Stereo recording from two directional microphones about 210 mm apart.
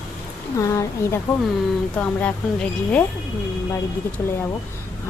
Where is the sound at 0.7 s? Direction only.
15° left (ahead or behind).